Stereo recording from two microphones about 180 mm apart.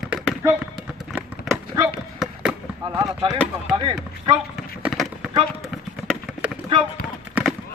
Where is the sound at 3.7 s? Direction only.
25° right (ahead or behind).